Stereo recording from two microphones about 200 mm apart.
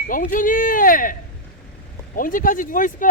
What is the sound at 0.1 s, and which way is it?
Speech, 40° left (ahead or behind).